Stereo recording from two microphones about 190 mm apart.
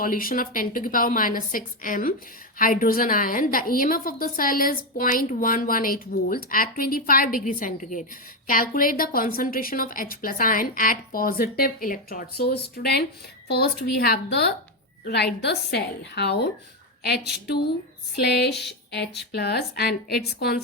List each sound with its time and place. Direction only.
0.0 s a woman's voice: 45° left (ahead or behind)